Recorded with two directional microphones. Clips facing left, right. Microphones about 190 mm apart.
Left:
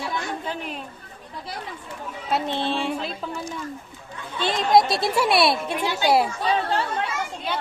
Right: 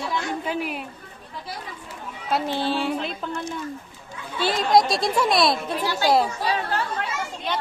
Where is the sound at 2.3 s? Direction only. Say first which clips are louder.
Right 1 dB; 5° right (ahead or behind).